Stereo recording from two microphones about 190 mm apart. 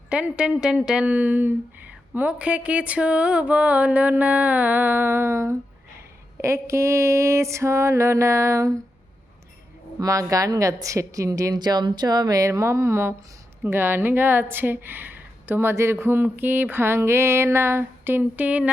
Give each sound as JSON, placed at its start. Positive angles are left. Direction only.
{"t": 0.1, "sound": "speech", "side_deg": -5}
{"t": 10.0, "sound": "speech", "side_deg": -15}